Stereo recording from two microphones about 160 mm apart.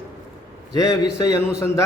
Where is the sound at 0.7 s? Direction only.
20° left (ahead or behind).